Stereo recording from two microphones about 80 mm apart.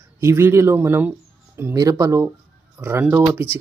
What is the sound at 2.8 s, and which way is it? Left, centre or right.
Speech, right.